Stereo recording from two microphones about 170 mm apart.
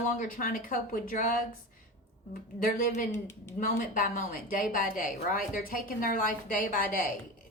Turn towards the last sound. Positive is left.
turn(degrees=55)  # may be behind; listen again after turning